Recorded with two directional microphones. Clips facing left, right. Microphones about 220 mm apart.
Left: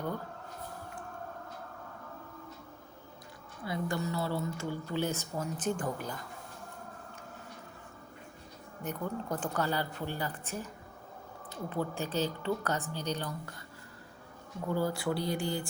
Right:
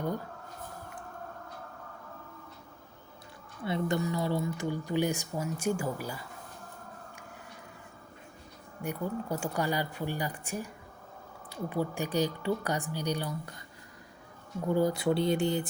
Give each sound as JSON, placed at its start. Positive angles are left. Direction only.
{"t": 3.6, "sound": "speech", "side_deg": -25}
{"t": 8.8, "sound": "speech", "side_deg": -10}
{"t": 14.7, "sound": "speech", "side_deg": -20}